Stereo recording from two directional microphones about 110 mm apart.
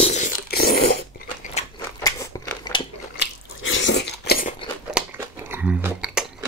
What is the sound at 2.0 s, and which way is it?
Scissors, 30° left (ahead or behind).